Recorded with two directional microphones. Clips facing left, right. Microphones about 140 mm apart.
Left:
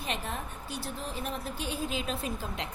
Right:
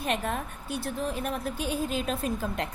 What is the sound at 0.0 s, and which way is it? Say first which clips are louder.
A woman's voice: right 6 dB; 55° right (ahead or behind).